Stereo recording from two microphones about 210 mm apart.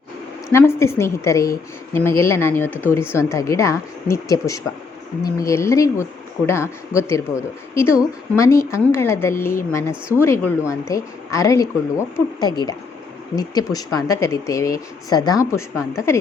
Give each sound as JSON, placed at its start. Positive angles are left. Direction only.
{"t": 0.5, "sound": "speech", "side_deg": 10}